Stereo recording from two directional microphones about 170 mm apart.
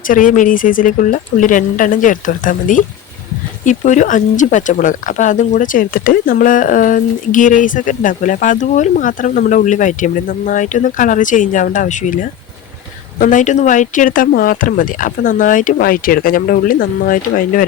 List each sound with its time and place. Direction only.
0.1 s speech: 50° left (ahead or behind)